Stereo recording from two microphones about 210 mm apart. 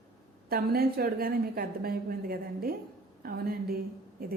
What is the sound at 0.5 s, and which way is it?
A woman's voice, 45° right (ahead or behind).